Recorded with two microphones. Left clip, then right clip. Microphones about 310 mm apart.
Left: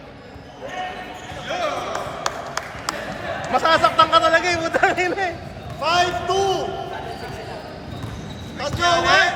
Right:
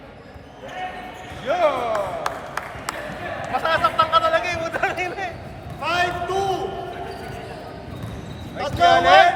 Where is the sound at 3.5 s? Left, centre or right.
Left.